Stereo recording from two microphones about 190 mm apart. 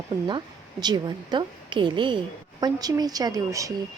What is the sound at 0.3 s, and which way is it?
Speech, 25° right (ahead or behind).